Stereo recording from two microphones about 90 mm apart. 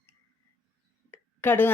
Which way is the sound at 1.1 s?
20° left (ahead or behind).